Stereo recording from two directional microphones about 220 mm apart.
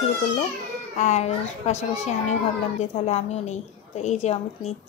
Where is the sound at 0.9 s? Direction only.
30° left (ahead or behind).